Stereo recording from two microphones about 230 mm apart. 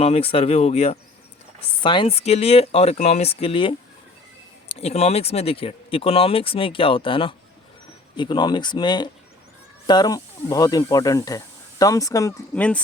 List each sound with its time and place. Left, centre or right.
0.0 s speech: left
4.8 s speech: left; by 12.8 s centre